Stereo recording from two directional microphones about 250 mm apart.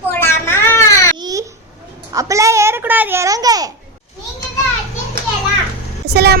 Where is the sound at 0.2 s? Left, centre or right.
Centre.